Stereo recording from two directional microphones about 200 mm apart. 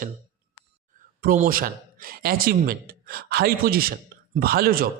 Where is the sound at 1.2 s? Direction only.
45° right (ahead or behind).